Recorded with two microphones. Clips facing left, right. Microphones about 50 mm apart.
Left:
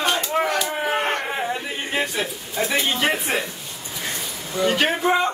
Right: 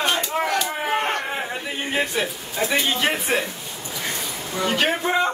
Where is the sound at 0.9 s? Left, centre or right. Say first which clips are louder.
Right 1 dB; centre.